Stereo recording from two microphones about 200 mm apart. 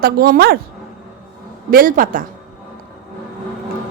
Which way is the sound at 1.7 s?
45° right (ahead or behind).